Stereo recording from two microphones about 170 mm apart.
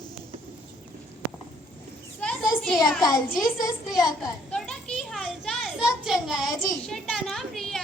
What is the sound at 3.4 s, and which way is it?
Speech, 20° left (ahead or behind).